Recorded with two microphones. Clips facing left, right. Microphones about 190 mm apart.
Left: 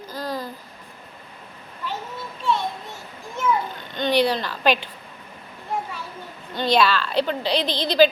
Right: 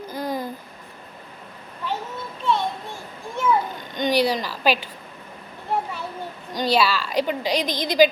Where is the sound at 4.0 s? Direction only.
10° right (ahead or behind).